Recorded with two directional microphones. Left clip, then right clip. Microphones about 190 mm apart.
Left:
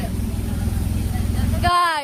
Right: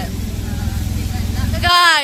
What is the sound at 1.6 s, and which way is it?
Vehicle, centre (ahead or behind).